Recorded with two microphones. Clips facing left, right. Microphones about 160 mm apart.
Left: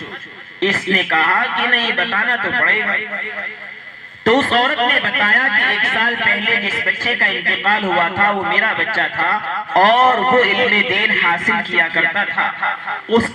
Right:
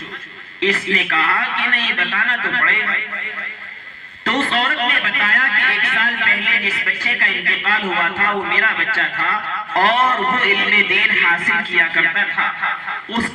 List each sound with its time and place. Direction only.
0.7 s a man's voice: 45° left (ahead or behind)
4.3 s a man's voice: 45° left (ahead or behind)